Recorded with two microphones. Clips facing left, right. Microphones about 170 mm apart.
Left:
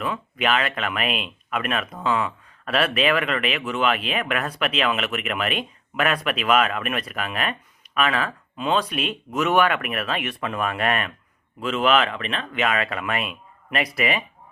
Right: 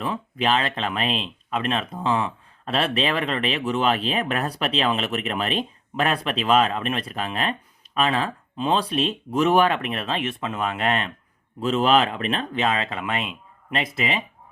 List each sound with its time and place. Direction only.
0.0 s speech: 30° right (ahead or behind)
11.6 s speech: 35° right (ahead or behind)